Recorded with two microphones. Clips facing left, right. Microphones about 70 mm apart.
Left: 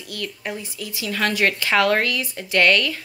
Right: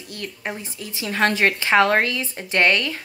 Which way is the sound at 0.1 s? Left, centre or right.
Right.